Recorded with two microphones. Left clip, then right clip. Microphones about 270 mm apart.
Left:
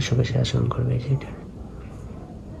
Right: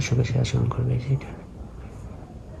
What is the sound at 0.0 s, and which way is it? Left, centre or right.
Speech, centre.